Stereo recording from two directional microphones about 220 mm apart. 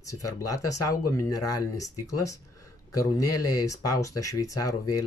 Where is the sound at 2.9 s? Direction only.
15° left (ahead or behind).